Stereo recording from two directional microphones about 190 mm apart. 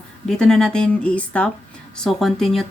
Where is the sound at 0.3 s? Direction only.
5° left (ahead or behind).